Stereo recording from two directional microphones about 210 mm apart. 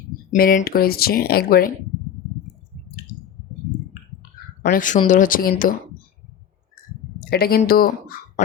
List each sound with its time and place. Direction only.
0.3 s speech: 45° left (ahead or behind)
4.6 s speech: 40° left (ahead or behind)
7.3 s speech: 45° left (ahead or behind)